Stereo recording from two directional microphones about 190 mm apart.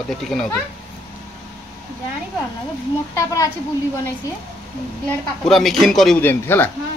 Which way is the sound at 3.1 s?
15° left (ahead or behind).